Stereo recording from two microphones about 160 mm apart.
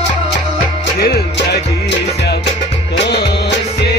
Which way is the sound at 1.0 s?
75° left (ahead or behind).